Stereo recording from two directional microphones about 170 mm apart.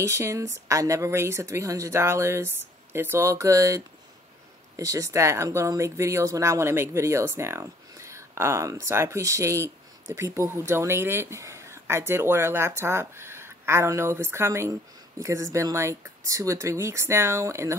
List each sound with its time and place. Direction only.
0.0 s speech: 15° right (ahead or behind)